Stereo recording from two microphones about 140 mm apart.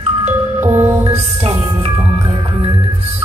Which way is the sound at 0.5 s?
15° right (ahead or behind).